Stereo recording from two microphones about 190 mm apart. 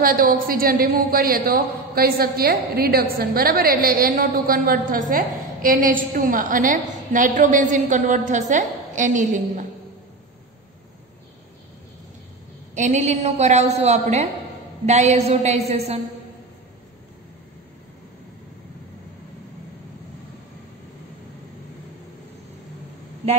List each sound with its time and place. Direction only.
0.0 s a woman's voice: 50° right (ahead or behind)
12.7 s a woman's voice: 40° right (ahead or behind)